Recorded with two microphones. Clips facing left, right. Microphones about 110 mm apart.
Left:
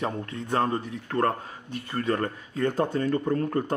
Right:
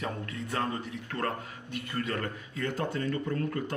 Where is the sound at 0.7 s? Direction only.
45° left (ahead or behind).